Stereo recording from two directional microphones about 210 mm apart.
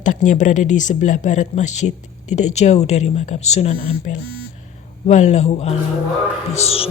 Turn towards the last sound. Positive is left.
turn(degrees=30)  # may be behind; listen again after turning